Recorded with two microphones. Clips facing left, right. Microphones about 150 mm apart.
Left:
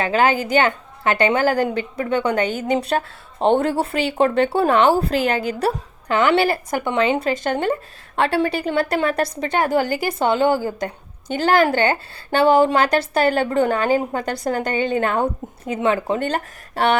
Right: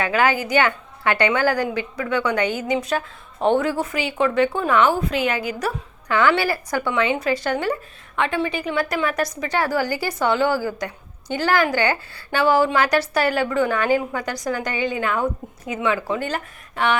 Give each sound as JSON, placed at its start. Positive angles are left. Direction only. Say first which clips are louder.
{"t": 0.0, "sound": "a woman's voice", "louder": "left 2 dB", "side_deg": 25}
{"t": 2.0, "sound": "a woman's voice", "louder": "left 1 dB", "side_deg": 50}
{"t": 3.0, "sound": "a woman's voice", "louder": "left 2 dB", "side_deg": 30}
{"t": 13.9, "sound": "a woman's voice", "louder": "left 1 dB", "side_deg": 45}
{"t": 14.4, "sound": "a woman's voice", "louder": "left 3 dB", "side_deg": 30}